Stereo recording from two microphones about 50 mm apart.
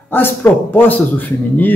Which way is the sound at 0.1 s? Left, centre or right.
Left.